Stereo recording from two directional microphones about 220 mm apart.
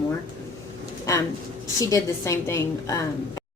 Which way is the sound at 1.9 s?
15° left (ahead or behind).